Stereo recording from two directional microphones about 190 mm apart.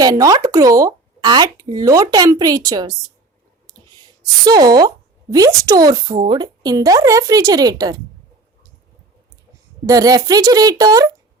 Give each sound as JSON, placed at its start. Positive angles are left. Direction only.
{"t": 0.0, "sound": "speech", "side_deg": -20}
{"t": 4.4, "sound": "speech", "side_deg": -20}
{"t": 9.8, "sound": "speech", "side_deg": -20}